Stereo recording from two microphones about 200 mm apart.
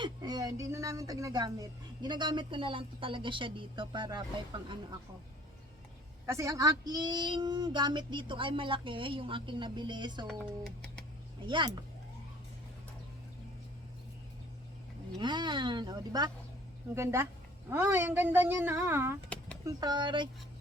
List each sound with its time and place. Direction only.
0.0 s speech: 20° right (ahead or behind)
6.2 s speech: 15° right (ahead or behind)
11.4 s speech: 20° right (ahead or behind)
15.2 s speech: 20° right (ahead or behind)